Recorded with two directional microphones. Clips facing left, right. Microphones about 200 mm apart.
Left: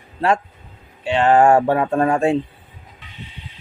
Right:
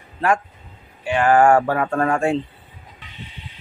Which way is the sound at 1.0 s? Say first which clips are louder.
Left 1 dB; 25° left (ahead or behind).